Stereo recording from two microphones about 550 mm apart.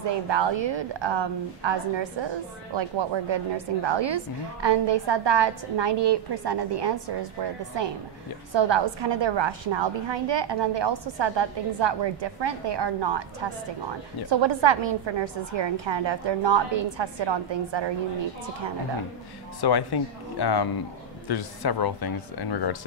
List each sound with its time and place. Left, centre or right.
0.1 s a woman's voice: right
19.6 s speech: left